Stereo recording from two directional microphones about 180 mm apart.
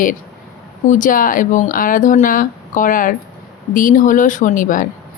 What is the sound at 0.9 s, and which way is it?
A woman's voice, 45° left (ahead or behind).